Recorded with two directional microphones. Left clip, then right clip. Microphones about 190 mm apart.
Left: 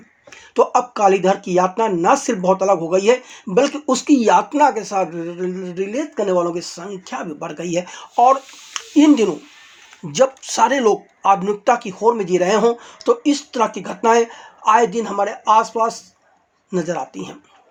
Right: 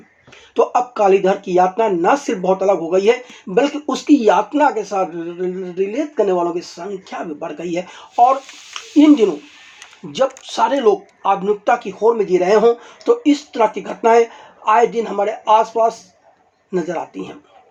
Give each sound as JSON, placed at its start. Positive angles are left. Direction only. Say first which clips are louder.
{"t": 0.5, "sound": "speech", "louder": "even", "side_deg": 25}